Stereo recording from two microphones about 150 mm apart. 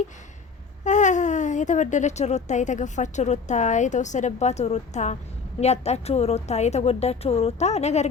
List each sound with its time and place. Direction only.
0.9 s speech: 55° left (ahead or behind)